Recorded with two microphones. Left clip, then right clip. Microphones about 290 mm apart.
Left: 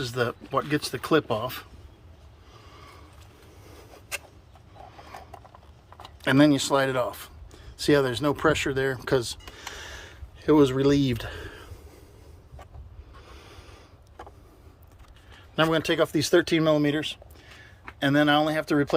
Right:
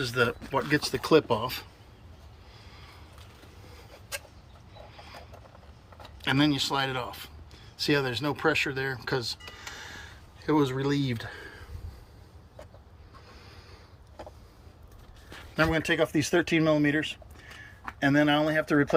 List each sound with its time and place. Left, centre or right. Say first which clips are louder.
0.0 s speech: right 1 dB; centre
6.2 s speech: left 5 dB; left
13.3 s a sound: left 5 dB; left
15.5 s speech: left 3 dB; left